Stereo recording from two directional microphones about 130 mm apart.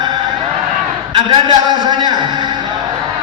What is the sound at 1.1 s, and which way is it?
A man's voice, 35° right (ahead or behind).